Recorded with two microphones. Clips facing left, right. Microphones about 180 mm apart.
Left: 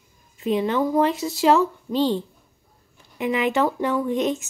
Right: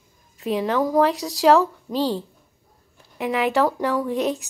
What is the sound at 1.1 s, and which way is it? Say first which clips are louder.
Speech: right 2 dB; 35° right (ahead or behind).